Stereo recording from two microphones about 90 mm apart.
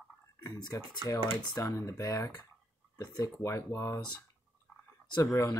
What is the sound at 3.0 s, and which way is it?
Speech, 45° left (ahead or behind).